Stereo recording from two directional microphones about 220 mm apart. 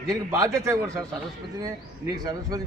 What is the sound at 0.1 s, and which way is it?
A man's voice, 15° right (ahead or behind).